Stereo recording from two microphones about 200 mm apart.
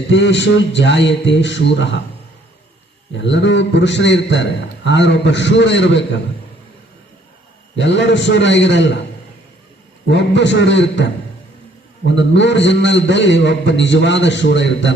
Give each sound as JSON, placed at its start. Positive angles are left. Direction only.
{"t": 0.1, "sound": "a man's voice", "side_deg": 60}
{"t": 3.2, "sound": "a man's voice", "side_deg": 65}
{"t": 7.8, "sound": "a man's voice", "side_deg": 65}
{"t": 10.1, "sound": "a man's voice", "side_deg": 60}